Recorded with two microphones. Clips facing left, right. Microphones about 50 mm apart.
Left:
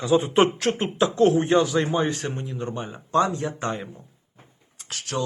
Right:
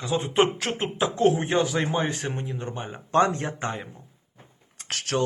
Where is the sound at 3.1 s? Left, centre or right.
Right.